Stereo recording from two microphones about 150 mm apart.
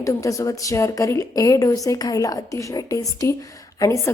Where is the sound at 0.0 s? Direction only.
20° left (ahead or behind).